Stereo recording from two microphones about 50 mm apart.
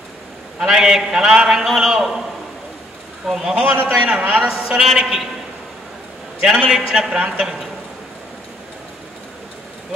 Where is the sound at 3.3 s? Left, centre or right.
Centre.